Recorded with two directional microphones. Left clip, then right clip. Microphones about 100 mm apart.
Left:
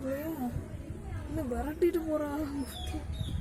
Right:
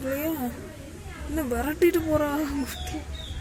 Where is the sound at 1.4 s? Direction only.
15° right (ahead or behind).